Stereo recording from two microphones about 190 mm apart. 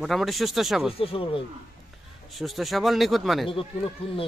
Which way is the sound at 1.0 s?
30° left (ahead or behind).